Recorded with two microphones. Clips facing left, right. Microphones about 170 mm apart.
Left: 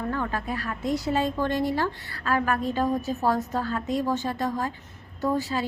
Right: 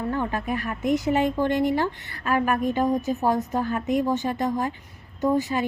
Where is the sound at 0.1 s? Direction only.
20° right (ahead or behind).